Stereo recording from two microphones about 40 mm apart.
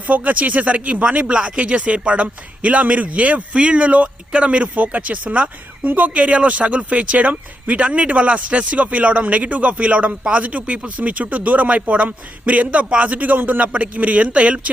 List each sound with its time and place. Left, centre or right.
0.1 s speech: right